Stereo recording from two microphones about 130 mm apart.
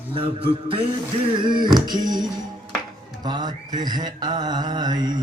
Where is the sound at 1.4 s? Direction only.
35° right (ahead or behind).